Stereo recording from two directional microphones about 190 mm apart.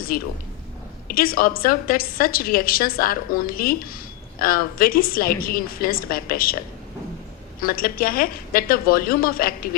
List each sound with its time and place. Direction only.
0.1 s a woman's voice: 50° left (ahead or behind)
7.7 s a woman's voice: 50° left (ahead or behind)